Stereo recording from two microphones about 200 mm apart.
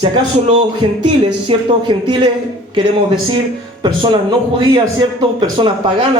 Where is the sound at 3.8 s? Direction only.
25° right (ahead or behind).